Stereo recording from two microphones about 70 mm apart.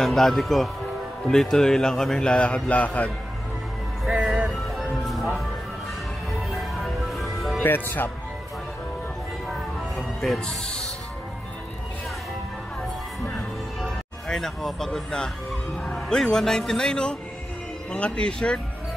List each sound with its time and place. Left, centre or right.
0.0 s a man's voice: centre; by 3.1 s left
4.2 s music: centre
6.5 s music: centre
7.6 s speech: left
9.5 s music: centre
10.4 s a man's voice: centre
13.7 s music: centre
15.8 s a man's voice: centre